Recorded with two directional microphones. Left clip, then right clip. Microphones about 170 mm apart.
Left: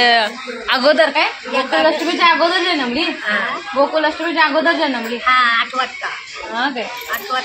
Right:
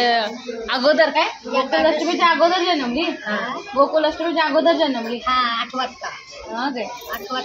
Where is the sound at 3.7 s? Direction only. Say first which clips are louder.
Left 1 dB; 20° left (ahead or behind).